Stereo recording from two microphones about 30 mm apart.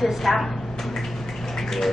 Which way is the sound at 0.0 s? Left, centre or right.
Centre.